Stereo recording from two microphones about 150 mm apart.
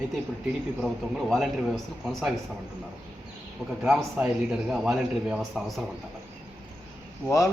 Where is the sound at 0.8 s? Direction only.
Centre (ahead or behind).